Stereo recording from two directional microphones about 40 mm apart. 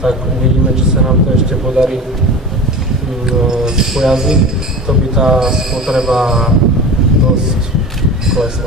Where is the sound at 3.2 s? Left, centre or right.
Centre.